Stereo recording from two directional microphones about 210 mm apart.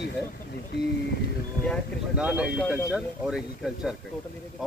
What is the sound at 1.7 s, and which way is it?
Speech, 5° right (ahead or behind).